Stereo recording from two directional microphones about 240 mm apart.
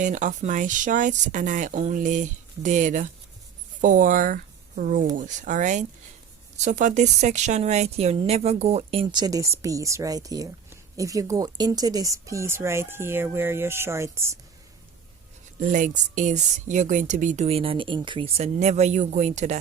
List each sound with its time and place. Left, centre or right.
0.0 s a woman's voice: right; by 14.3 s centre
15.6 s speech: right